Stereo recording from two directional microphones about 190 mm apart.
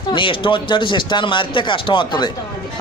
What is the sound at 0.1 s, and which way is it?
Speech, 25° left (ahead or behind).